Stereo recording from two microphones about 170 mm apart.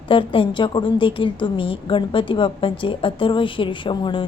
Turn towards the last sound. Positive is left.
turn(degrees=30)  # may be behind; listen again after turning